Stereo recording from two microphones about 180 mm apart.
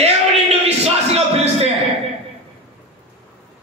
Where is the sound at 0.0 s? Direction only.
35° right (ahead or behind).